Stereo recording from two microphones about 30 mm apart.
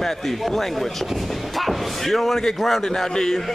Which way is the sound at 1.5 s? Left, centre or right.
Centre.